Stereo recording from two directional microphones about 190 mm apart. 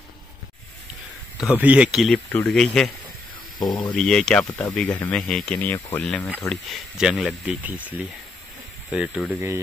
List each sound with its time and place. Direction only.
1.4 s speech: 5° right (ahead or behind)
3.5 s speech: 20° left (ahead or behind)
3.9 s speech: 5° left (ahead or behind)
8.9 s speech: 5° right (ahead or behind)